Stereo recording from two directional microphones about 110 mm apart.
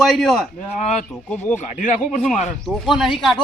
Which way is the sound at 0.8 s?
90° left.